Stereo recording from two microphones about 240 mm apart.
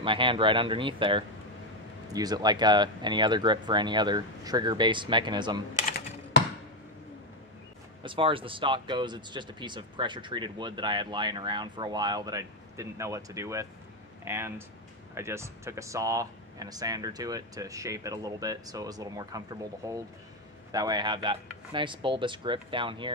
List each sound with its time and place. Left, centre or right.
0.0 s speech: right
8.0 s speech: right